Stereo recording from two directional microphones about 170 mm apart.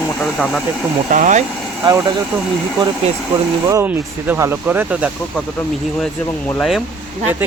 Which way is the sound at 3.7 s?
15° right (ahead or behind).